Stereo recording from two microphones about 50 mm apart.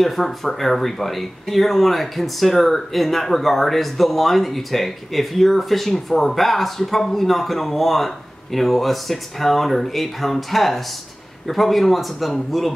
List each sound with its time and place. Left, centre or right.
0.0 s speech: centre